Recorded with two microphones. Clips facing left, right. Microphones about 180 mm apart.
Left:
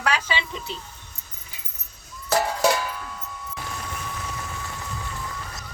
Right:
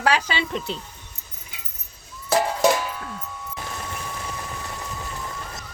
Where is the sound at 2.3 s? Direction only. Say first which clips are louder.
Right 2 dB; 15° right (ahead or behind).